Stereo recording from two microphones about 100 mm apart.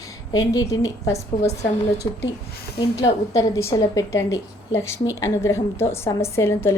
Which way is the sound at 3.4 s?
35° left (ahead or behind).